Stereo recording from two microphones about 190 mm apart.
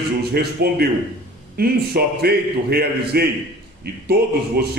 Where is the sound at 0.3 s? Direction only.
55° right (ahead or behind).